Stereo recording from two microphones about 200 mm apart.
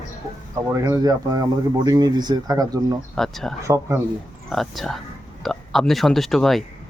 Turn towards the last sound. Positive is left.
turn(degrees=0)  # may be behind; listen again after turning